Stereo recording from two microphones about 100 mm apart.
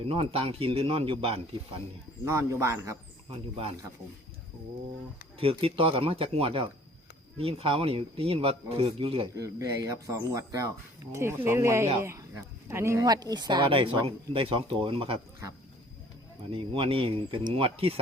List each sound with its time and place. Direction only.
0.1 s speech: 70° right (ahead or behind)
2.2 s a man's voice: 30° right (ahead or behind)
3.2 s speech: 75° right (ahead or behind)
5.4 s speech: 70° right (ahead or behind)
9.3 s speech: 35° right (ahead or behind)
13.1 s speech: 40° right (ahead or behind)
13.7 s speech: 65° right (ahead or behind)
16.5 s speech: 70° right (ahead or behind)